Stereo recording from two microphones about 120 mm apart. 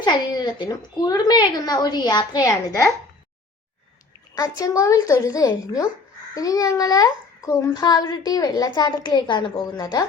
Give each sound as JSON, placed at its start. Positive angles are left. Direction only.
{"t": 0.0, "sound": "a woman's voice", "side_deg": 35}
{"t": 4.4, "sound": "a woman's voice", "side_deg": 30}